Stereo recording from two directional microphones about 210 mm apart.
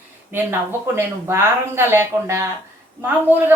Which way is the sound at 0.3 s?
10° right (ahead or behind).